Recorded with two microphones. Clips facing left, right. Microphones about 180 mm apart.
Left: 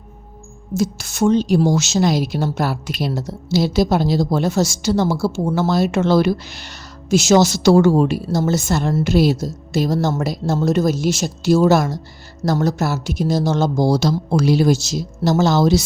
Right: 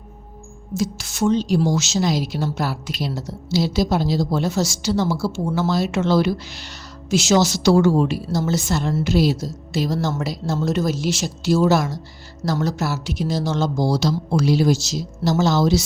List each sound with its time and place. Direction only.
0.8 s a woman's voice: 50° left (ahead or behind)